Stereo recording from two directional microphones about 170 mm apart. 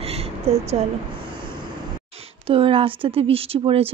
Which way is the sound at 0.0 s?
35° right (ahead or behind).